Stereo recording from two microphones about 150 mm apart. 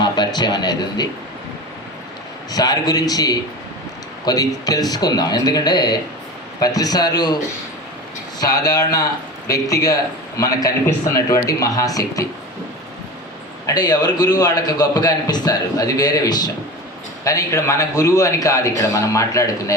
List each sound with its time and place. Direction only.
0.0 s speech: 30° left (ahead or behind)
2.5 s a man's voice: 25° left (ahead or behind)
8.4 s a man's voice: 25° left (ahead or behind)
13.7 s a man's voice: 25° left (ahead or behind)